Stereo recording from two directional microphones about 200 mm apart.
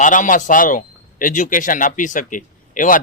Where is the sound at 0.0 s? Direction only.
40° left (ahead or behind).